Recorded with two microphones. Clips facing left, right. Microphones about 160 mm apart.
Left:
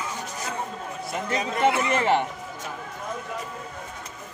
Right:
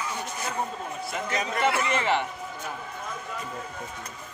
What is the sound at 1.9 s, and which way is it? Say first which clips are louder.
Speech: left 3 dB; 45° left (ahead or behind).